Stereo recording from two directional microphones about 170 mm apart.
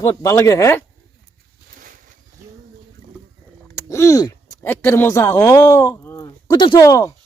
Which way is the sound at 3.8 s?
15° left (ahead or behind).